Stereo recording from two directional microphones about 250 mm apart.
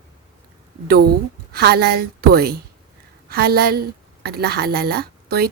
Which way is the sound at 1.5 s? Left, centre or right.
Right.